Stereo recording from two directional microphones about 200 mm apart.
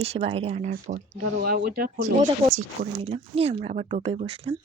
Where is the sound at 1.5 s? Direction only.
50° right (ahead or behind).